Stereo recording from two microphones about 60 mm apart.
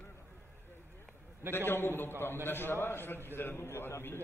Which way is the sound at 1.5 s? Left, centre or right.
Left.